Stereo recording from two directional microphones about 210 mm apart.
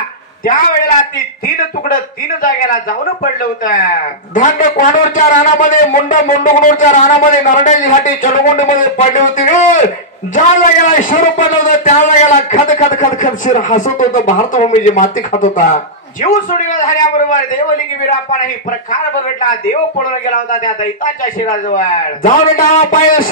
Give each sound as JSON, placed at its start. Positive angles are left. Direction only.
{"t": 3.3, "sound": "a man's voice", "side_deg": 40}
{"t": 19.4, "sound": "a man's voice", "side_deg": 40}